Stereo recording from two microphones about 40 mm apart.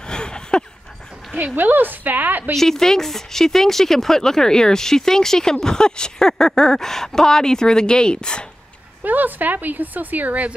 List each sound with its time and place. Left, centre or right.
0.0 s a sound: left
1.3 s speech: right
2.5 s speech: centre
9.0 s speech: right